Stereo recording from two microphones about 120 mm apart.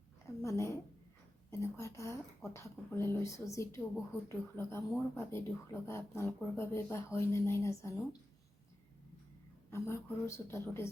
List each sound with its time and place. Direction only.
0.4 s a sound: 25° left (ahead or behind)
1.5 s speech: 25° left (ahead or behind)
9.6 s speech: 20° left (ahead or behind)